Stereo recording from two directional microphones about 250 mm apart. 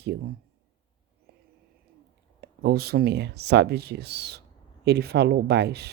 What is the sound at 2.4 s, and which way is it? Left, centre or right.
Speech, right.